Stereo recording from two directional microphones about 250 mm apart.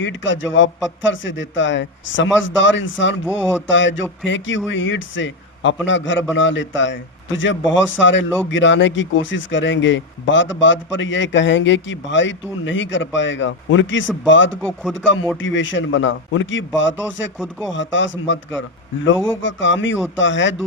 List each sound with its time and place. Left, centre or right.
0.0 s speech: left
14.6 s speech: centre
14.9 s speech: left